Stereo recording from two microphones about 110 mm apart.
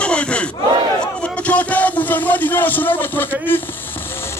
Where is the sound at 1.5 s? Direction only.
15° left (ahead or behind).